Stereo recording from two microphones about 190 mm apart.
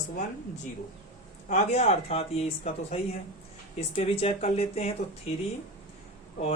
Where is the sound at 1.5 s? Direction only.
35° left (ahead or behind).